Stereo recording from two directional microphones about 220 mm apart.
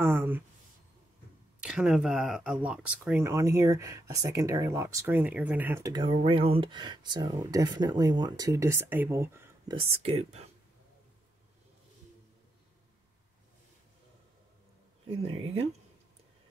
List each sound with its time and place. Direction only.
0.0 s speech: 10° right (ahead or behind)
1.6 s speech: 5° right (ahead or behind)
9.8 s speech: 25° right (ahead or behind)
15.0 s speech: 25° right (ahead or behind)